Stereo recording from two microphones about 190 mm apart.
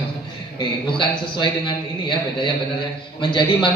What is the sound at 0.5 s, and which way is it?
A man's voice, 25° left (ahead or behind).